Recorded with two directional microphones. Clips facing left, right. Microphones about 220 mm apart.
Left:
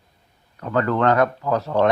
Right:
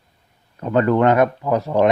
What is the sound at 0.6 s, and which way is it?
Speech, 20° right (ahead or behind).